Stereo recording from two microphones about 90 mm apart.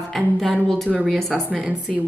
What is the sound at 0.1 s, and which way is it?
Speech, centre (ahead or behind).